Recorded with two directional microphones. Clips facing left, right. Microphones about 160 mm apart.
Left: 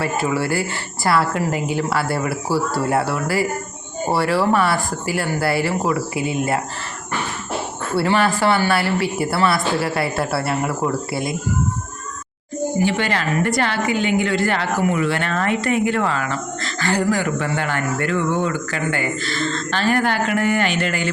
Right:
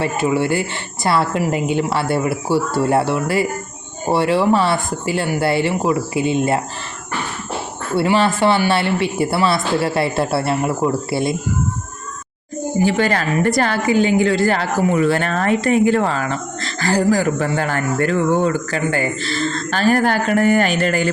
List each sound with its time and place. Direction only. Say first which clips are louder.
0.0 s speech: right 3 dB; 20° right (ahead or behind)
7.9 s speech: right 2 dB; 20° right (ahead or behind)
12.8 s a woman's voice: right 5 dB; 40° right (ahead or behind)